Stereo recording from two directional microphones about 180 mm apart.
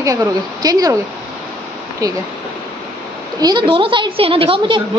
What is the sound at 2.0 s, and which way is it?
Speech, 20° right (ahead or behind).